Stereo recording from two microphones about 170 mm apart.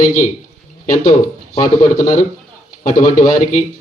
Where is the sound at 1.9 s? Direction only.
50° left (ahead or behind).